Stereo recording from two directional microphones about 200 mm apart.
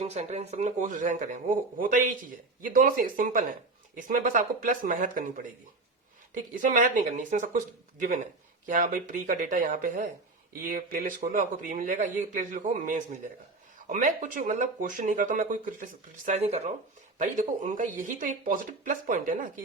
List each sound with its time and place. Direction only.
0.0 s speech: 35° right (ahead or behind)
6.5 s speech: 40° right (ahead or behind)